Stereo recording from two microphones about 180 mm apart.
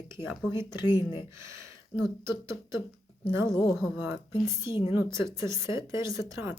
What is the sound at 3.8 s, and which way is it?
Speech, 15° right (ahead or behind).